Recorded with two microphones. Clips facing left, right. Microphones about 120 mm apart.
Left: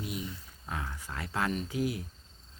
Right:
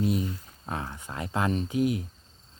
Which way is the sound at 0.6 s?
30° right (ahead or behind).